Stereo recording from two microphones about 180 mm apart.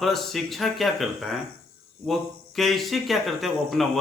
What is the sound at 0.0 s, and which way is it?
Speech, centre (ahead or behind).